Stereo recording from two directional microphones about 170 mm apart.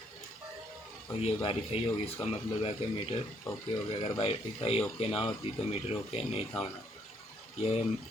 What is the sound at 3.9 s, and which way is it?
Speech, 35° left (ahead or behind).